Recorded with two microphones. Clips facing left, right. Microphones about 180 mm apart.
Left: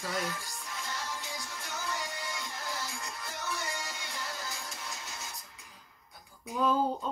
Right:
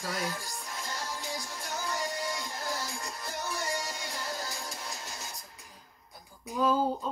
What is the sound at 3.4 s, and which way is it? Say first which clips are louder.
Music: right 3 dB; 40° right (ahead or behind).